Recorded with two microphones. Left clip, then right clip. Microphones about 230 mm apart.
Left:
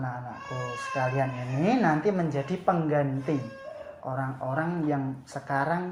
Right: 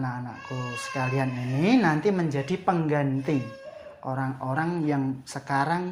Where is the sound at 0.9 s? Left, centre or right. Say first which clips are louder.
Left 1 dB; right.